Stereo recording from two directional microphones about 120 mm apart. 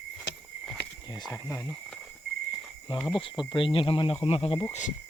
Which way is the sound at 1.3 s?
25° left (ahead or behind).